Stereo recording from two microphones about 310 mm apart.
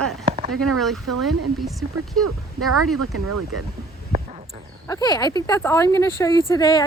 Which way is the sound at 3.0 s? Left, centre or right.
Right.